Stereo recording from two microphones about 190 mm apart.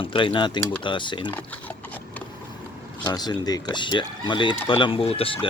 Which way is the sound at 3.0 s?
20° left (ahead or behind).